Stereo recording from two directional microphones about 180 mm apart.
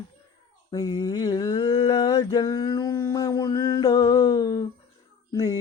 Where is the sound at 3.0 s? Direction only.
20° left (ahead or behind).